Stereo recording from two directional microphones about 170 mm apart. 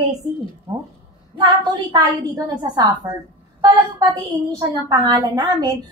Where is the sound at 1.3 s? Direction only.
25° right (ahead or behind).